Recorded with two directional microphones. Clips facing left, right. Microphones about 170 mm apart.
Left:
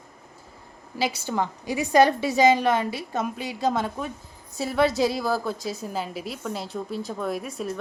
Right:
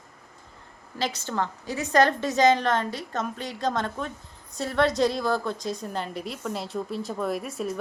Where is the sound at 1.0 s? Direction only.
10° left (ahead or behind).